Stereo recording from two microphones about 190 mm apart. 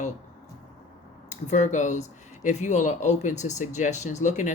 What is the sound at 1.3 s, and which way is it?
A woman's voice, 40° left (ahead or behind).